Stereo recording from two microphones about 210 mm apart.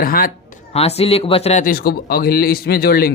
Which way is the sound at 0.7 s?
30° left (ahead or behind).